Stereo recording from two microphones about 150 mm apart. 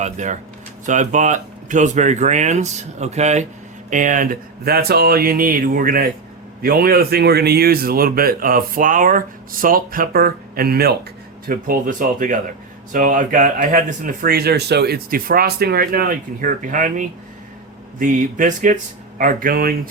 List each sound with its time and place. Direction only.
0.0 s speech: 50° right (ahead or behind); by 6.1 s 70° right (ahead or behind)
6.6 s a man's voice: 85° right
11.4 s speech: 70° right (ahead or behind)